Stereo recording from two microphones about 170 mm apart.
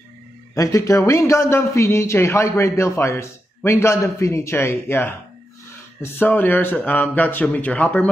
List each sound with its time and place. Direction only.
0.6 s a man's voice: 20° left (ahead or behind)
6.1 s a man's voice: 10° left (ahead or behind)